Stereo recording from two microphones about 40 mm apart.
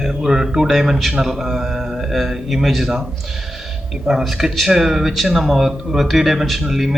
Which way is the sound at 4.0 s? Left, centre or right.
Centre.